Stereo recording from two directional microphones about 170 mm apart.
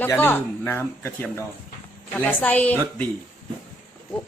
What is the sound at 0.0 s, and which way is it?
Speech, 10° left (ahead or behind).